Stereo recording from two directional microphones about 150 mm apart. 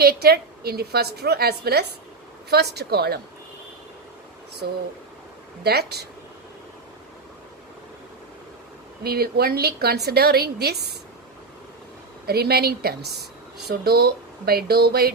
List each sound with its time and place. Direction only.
0.0 s a woman's voice: 90° right
4.6 s a woman's voice: 90° right
9.0 s a woman's voice: 90° right
12.2 s a woman's voice: 90° right